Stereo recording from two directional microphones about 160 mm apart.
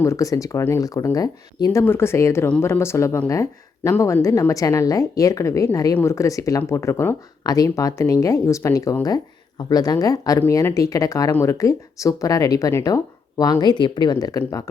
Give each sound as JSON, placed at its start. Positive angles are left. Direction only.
{"t": 0.0, "sound": "speech", "side_deg": 20}